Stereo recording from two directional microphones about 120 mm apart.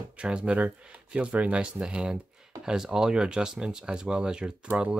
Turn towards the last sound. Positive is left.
turn(degrees=-10)  # may be behind; listen again after turning